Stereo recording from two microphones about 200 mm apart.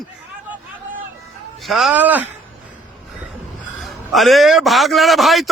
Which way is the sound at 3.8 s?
Centre (ahead or behind).